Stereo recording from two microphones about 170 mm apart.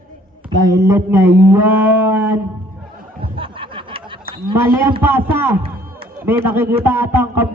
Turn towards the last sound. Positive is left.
turn(degrees=-10)  # may be behind; listen again after turning